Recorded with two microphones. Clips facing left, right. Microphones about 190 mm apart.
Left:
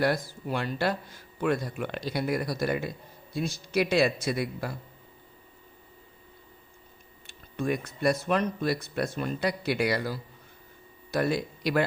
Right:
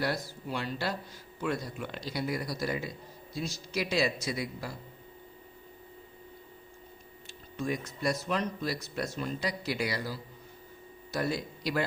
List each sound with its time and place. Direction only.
0.0 s speech: 55° left (ahead or behind)
7.3 s speech: 60° left (ahead or behind)